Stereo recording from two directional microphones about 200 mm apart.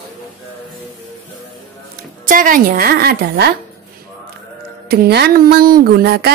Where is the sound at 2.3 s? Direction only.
45° right (ahead or behind).